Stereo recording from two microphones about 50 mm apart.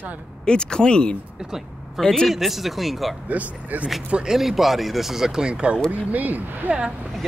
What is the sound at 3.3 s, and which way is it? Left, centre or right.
Speech, right.